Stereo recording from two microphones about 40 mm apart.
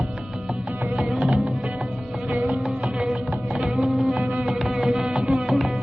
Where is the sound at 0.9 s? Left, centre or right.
Right.